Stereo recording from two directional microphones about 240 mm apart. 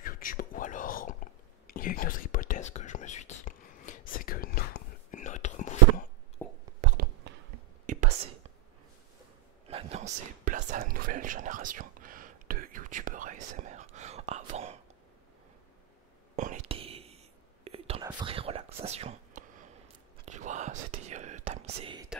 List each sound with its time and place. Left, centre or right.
0.0 s whispering: left
6.4 s whispering: centre
6.8 s a sound: right
7.3 s a sound: right
7.8 s whispering: right
9.7 s whispering: right
16.3 s whispering: right